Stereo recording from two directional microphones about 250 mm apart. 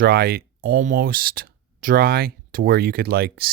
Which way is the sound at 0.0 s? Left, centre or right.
Right.